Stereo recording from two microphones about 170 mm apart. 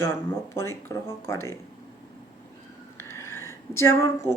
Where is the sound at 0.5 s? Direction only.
15° left (ahead or behind).